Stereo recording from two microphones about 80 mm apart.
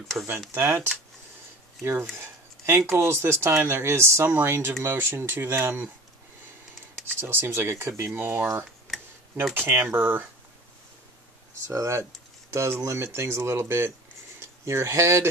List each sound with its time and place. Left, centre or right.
0.2 s speech: right
2.1 s a sound: right
2.9 s speech: right
7.2 s speech: right
8.8 s tick-tock: centre
9.5 s speech: right
11.6 s speech: right